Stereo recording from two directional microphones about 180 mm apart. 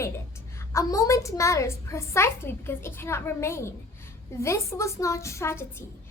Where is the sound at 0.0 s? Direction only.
15° left (ahead or behind).